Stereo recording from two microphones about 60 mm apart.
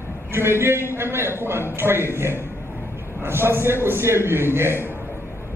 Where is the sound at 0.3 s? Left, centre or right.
Right.